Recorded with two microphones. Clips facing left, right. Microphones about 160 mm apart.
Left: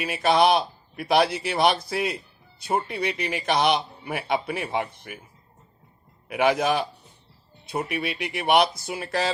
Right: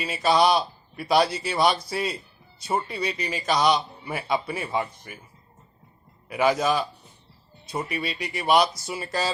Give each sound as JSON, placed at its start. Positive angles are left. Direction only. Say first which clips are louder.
{"t": 0.0, "sound": "speech", "louder": "left 1 dB", "side_deg": 60}
{"t": 6.2, "sound": "speech", "louder": "left 1 dB", "side_deg": 60}